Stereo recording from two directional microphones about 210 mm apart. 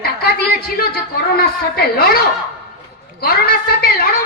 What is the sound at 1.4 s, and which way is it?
A woman's voice, 50° left (ahead or behind).